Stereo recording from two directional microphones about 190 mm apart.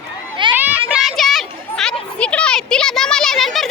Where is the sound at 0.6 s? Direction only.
10° right (ahead or behind).